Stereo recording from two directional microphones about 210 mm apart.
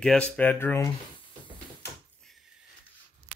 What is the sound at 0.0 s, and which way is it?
Speech, 5° left (ahead or behind).